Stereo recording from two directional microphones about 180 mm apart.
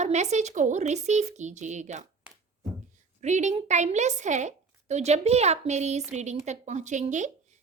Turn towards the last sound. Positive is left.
turn(degrees=-40)  # may be behind; listen again after turning